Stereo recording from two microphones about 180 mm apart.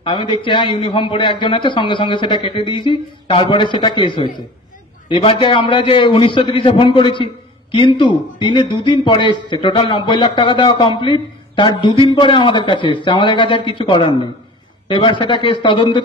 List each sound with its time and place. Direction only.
0.0 s a man's voice: 25° left (ahead or behind)